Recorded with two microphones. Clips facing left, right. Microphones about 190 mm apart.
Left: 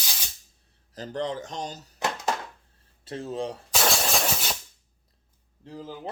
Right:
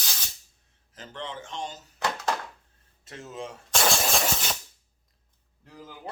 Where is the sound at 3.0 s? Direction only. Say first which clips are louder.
Left 7 dB; 30° left (ahead or behind).